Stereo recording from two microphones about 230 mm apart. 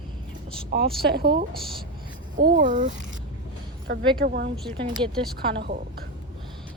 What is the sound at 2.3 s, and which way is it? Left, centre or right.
Speech, right.